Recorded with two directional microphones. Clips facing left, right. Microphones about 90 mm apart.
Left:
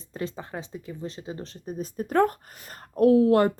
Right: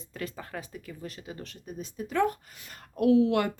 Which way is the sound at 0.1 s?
25° left (ahead or behind).